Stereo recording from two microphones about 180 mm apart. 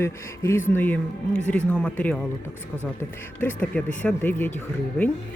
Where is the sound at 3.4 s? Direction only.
10° left (ahead or behind).